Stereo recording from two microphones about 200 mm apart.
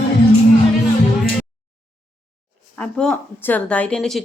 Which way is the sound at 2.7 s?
5° left (ahead or behind).